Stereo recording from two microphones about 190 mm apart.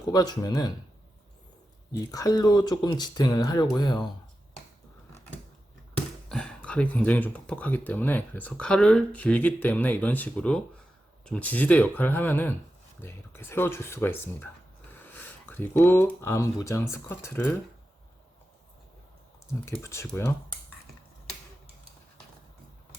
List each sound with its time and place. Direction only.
0.1 s speech: 20° left (ahead or behind)
2.0 s speech: 20° left (ahead or behind)
6.2 s speech: 5° left (ahead or behind)
19.8 s speech: 15° left (ahead or behind)